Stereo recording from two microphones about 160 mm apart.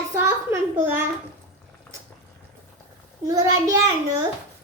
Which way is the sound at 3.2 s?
20° right (ahead or behind).